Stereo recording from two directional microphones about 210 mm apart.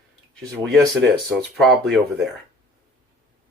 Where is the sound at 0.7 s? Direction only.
Centre (ahead or behind).